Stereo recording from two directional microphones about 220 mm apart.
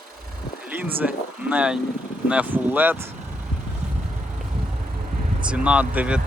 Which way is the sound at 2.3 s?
5° right (ahead or behind).